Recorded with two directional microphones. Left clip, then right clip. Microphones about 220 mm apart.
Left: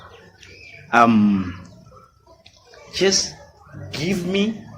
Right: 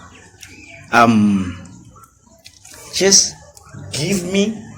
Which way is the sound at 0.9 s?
30° right (ahead or behind).